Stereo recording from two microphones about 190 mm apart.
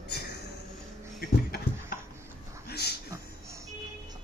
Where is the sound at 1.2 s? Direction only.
55° left (ahead or behind).